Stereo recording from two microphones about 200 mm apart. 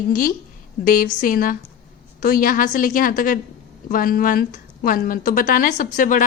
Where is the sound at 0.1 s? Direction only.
45° left (ahead or behind).